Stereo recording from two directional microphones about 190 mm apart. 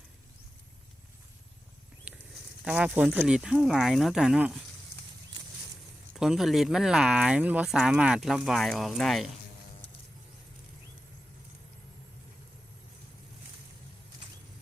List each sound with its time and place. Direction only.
2.6 s speech: 5° right (ahead or behind)
6.1 s speech: centre (ahead or behind)